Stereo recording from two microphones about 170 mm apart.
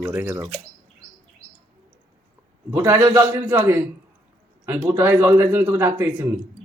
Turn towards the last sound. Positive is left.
turn(degrees=-15)  # may be behind; listen again after turning